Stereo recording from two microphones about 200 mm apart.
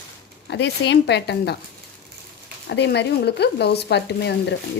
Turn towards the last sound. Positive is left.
turn(degrees=60)  # may be behind; listen again after turning